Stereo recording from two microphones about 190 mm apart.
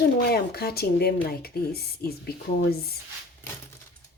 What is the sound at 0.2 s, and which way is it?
Speech, 55° left (ahead or behind).